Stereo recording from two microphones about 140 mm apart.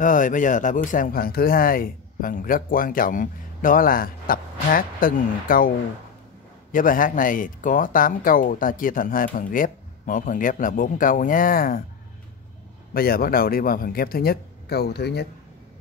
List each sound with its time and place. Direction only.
0.0 s speech: 70° left (ahead or behind); by 5.7 s 90° left
6.7 s speech: 75° left (ahead or behind)
12.9 s speech: 90° left